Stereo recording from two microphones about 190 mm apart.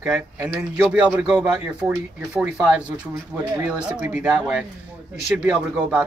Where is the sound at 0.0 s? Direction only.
10° right (ahead or behind).